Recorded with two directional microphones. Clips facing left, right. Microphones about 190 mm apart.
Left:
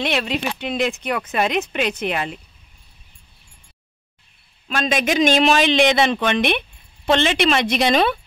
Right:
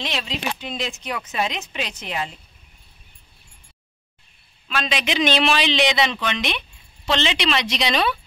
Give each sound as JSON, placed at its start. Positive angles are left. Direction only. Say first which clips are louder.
{"t": 0.0, "sound": "speech", "louder": "left 6 dB", "side_deg": 60}
{"t": 4.6, "sound": "a man's voice", "louder": "left 5 dB", "side_deg": 45}